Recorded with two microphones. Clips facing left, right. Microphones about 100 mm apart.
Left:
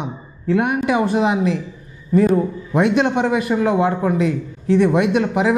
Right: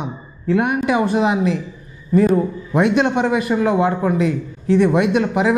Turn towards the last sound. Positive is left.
turn(degrees=-15)  # may be behind; listen again after turning